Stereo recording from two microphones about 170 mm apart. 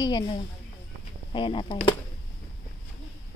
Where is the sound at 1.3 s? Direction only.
30° left (ahead or behind).